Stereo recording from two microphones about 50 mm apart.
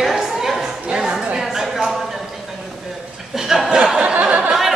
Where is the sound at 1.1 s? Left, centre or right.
Centre.